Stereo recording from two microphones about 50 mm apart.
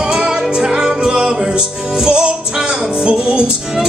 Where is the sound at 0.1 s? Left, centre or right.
Centre.